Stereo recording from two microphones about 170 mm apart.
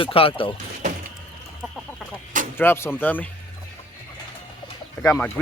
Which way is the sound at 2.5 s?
15° left (ahead or behind).